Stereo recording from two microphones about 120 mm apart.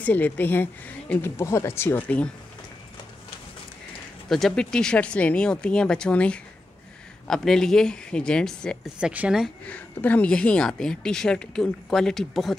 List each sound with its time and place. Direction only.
0.0 s speech: 15° left (ahead or behind)
4.3 s speech: centre (ahead or behind)
9.0 s speech: 10° right (ahead or behind)
9.7 s speech: 15° left (ahead or behind)